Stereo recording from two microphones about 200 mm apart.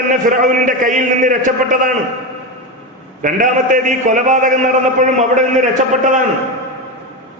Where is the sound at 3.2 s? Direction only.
40° right (ahead or behind).